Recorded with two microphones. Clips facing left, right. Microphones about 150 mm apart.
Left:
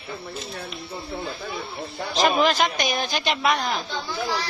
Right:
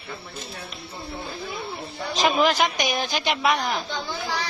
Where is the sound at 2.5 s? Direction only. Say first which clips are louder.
Even; 15° right (ahead or behind).